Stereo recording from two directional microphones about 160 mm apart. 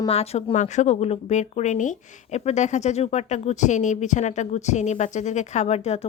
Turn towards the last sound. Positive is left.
turn(degrees=40)  # may be behind; listen again after turning